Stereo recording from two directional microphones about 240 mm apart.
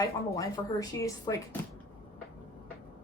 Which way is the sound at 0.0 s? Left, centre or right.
Centre.